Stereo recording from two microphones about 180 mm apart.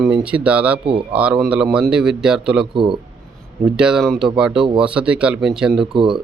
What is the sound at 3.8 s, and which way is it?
A man's voice, 5° right (ahead or behind).